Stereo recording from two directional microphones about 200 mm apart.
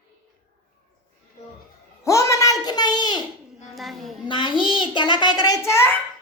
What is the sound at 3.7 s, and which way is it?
Speech, centre (ahead or behind).